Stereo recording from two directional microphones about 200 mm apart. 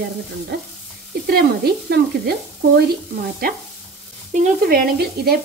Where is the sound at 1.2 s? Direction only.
50° right (ahead or behind).